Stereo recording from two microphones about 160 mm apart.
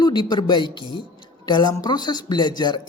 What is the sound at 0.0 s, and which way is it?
Speech, 30° left (ahead or behind).